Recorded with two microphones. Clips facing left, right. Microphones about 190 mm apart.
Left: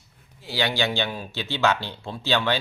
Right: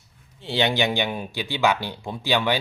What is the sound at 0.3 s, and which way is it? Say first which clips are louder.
Speech: right 3 dB; 25° right (ahead or behind).